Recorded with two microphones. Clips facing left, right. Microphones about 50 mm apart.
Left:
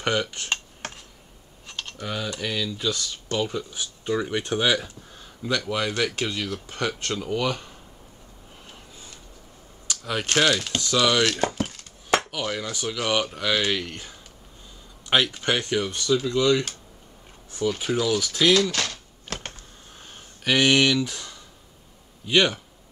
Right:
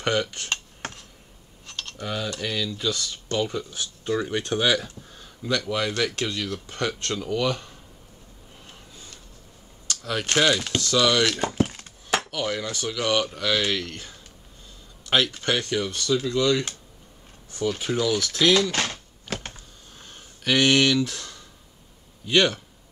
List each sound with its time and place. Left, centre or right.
0.0 s speech: centre
1.7 s computer keyboard: centre
2.0 s speech: centre
8.9 s a sound: centre
9.8 s typing: centre
10.3 s speech: centre
10.8 s speech: centre
17.6 s speech: centre
18.7 s typewriter: right
20.4 s speech: centre